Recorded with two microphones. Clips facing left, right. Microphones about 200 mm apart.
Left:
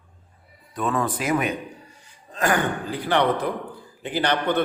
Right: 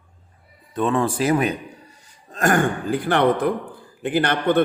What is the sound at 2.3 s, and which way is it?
A man's voice, 45° right (ahead or behind).